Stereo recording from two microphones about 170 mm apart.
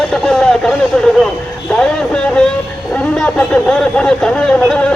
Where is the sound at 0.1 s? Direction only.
5° left (ahead or behind).